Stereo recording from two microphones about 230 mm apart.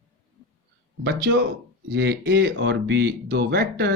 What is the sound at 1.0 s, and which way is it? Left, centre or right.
Speech, right.